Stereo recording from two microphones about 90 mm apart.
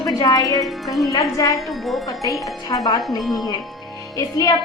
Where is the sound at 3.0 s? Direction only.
Centre (ahead or behind).